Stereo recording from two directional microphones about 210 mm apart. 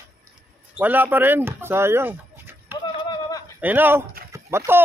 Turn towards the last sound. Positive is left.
turn(degrees=-10)  # may be behind; listen again after turning